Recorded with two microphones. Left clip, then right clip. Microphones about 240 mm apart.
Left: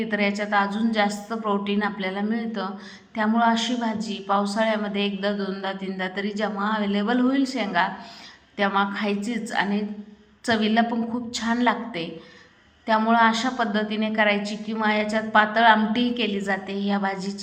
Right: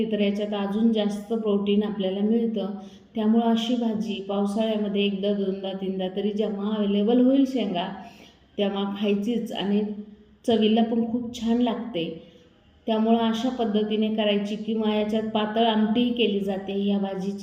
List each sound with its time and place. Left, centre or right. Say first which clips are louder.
0.1 s a woman's voice: left 3 dB; left
3.2 s a woman's voice: left 3 dB; left